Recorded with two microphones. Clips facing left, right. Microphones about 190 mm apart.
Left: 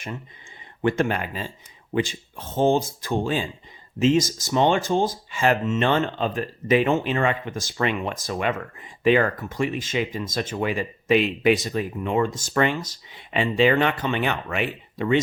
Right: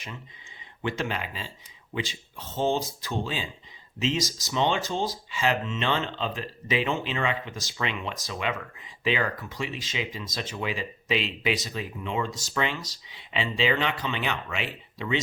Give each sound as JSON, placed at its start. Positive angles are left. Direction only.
{"t": 0.8, "sound": "speech", "side_deg": 50}